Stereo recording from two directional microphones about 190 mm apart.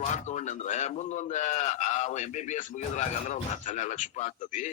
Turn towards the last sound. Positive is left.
turn(degrees=40)  # may be behind; listen again after turning